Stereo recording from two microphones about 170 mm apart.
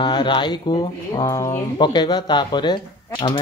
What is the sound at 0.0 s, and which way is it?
Speech, 30° left (ahead or behind).